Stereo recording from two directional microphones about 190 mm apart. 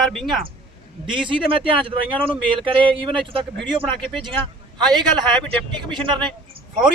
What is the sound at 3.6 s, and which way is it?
Speech, 5° left (ahead or behind).